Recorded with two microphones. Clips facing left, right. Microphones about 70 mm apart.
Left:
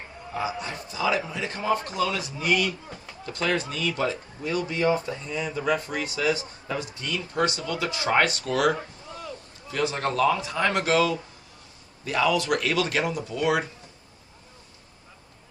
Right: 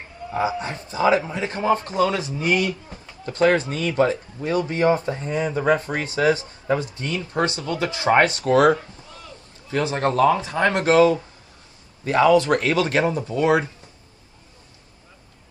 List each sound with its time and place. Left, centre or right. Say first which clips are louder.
0.4 s speech: right 5 dB; right